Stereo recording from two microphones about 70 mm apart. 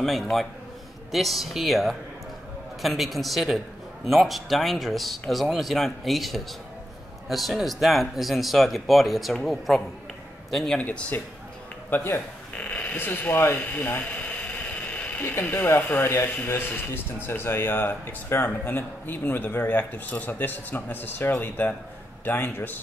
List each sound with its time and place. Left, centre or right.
0.0 s a man's voice: centre
10.8 s a man's voice: left
12.5 s a sound: left
15.9 s a man's voice: left